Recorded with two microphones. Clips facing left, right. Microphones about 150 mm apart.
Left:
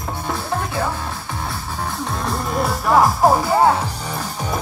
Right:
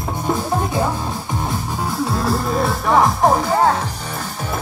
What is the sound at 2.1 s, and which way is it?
Music, 5° right (ahead or behind).